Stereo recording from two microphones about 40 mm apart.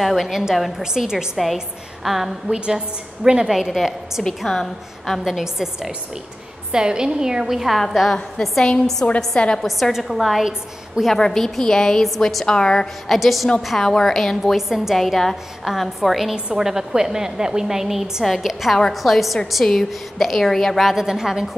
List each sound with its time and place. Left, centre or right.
0.0 s a woman's voice: centre
2.5 s a woman's voice: centre
3.4 s a woman's voice: centre
4.5 s a woman's voice: centre
5.2 s a woman's voice: centre
7.7 s a woman's voice: centre
11.1 s a woman's voice: centre
13.1 s a woman's voice: centre
14.4 s a woman's voice: centre
15.0 s a woman's voice: centre
16.3 s a woman's voice: right
16.6 s a woman's voice: centre
20.8 s a woman's voice: centre